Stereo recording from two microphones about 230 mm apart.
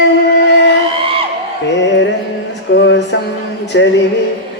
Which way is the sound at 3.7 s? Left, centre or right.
Left.